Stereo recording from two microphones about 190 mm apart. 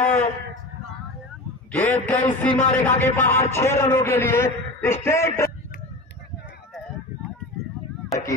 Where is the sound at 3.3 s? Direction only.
15° left (ahead or behind).